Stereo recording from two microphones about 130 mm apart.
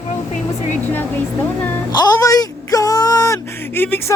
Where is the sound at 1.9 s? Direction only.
30° left (ahead or behind).